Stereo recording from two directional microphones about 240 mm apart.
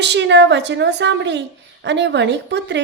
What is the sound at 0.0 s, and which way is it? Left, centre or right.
A woman's voice, right.